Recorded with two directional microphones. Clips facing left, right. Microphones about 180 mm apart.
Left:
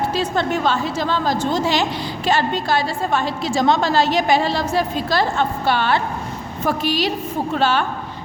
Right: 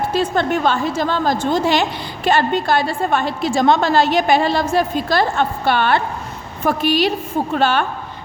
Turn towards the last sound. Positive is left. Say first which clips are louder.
# right 2 dB
turn(degrees=-55)  # may be behind; listen again after turning